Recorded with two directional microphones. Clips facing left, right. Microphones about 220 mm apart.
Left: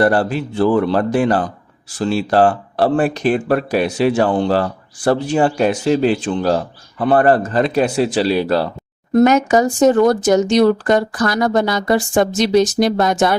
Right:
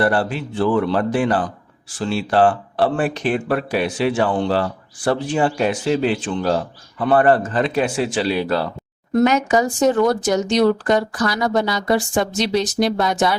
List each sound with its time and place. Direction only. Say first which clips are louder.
0.0 s speech: left 4 dB; 40° left (ahead or behind)